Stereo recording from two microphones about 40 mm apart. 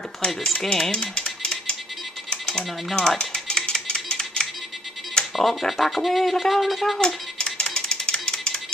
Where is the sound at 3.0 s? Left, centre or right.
Centre.